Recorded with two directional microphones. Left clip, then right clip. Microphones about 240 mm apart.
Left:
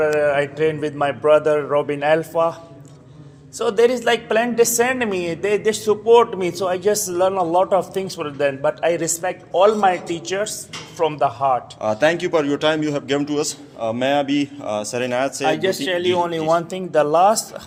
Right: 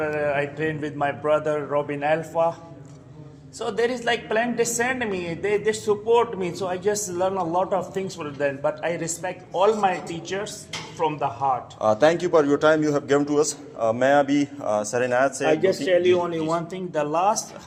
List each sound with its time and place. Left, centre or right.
0.0 s a woman's voice: left
3.6 s a woman's voice: left
11.8 s a man's voice: centre
15.4 s a woman's voice: left